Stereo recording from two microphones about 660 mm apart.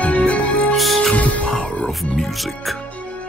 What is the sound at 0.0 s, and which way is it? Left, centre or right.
Music, centre.